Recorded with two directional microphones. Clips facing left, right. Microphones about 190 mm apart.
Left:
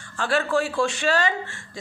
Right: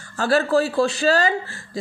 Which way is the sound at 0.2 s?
40° right (ahead or behind).